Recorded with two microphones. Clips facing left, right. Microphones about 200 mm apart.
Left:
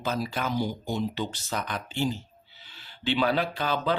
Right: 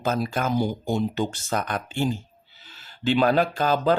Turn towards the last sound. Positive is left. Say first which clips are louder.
# right 6 dB
turn(degrees=-45)  # may be behind; listen again after turning